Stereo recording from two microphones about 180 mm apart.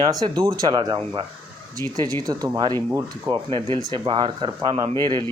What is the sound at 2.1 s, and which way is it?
Speech, 20° right (ahead or behind).